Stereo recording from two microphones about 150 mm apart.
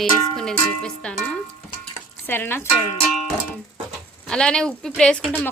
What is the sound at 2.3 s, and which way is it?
Speech, 15° left (ahead or behind).